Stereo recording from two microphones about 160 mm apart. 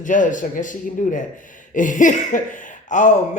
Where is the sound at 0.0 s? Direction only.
55° left (ahead or behind).